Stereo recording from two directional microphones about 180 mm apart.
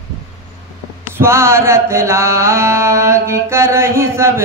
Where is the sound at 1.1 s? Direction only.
15° right (ahead or behind).